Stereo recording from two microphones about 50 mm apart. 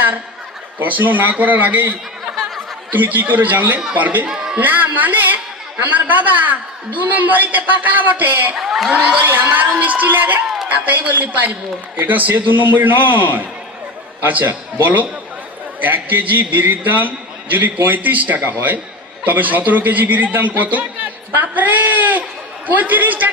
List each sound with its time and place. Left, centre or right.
0.7 s a man's voice: right
4.3 s a sound: centre
4.6 s a man's voice: right
8.5 s a man's voice: centre
9.2 s a man's voice: right